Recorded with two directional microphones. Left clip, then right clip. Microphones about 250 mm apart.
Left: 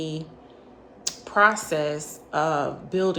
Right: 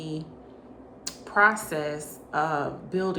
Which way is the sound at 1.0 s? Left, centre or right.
Left.